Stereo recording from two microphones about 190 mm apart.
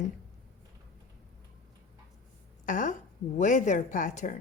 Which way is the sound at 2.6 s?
45° left (ahead or behind).